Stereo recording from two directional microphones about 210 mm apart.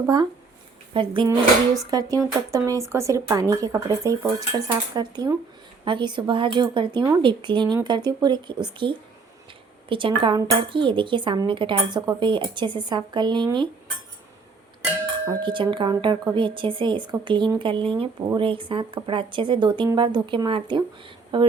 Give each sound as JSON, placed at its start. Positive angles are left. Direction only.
{"t": 0.9, "sound": "speech", "side_deg": -25}
{"t": 15.3, "sound": "speech", "side_deg": -25}